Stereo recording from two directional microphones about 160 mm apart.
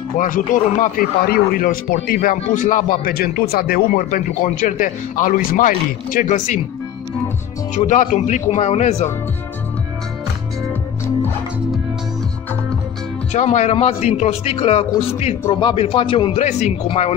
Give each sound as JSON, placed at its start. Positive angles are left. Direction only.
{"t": 0.2, "sound": "a man's voice", "side_deg": 55}
{"t": 7.7, "sound": "speech", "side_deg": 50}
{"t": 13.3, "sound": "a man's voice", "side_deg": 45}